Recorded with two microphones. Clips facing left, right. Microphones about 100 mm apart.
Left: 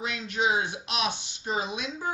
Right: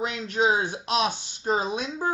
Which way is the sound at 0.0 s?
40° right (ahead or behind).